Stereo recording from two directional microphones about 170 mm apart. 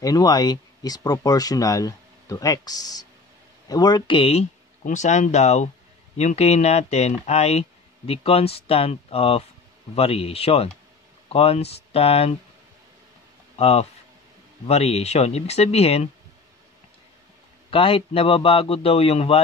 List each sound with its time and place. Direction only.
0.0 s a man's voice: 25° left (ahead or behind)
13.6 s a man's voice: 40° left (ahead or behind)
17.6 s a man's voice: 30° left (ahead or behind)